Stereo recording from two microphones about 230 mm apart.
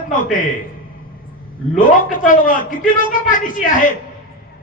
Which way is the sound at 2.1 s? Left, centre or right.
Left.